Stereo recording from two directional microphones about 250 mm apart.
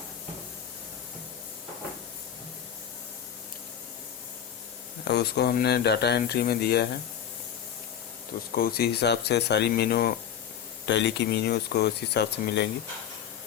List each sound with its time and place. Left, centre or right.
5.0 s speech: left
8.5 s speech: left